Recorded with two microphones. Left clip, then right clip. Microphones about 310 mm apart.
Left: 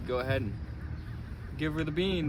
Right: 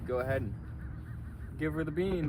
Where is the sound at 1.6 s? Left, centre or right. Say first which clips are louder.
Left 2 dB; left.